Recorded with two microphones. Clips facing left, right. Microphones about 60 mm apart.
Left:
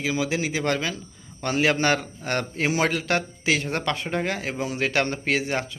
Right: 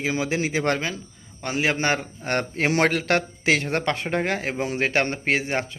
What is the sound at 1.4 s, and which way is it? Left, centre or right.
Speech, centre.